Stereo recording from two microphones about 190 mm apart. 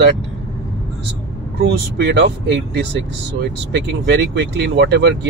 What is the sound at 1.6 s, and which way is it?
Speech, 65° right (ahead or behind).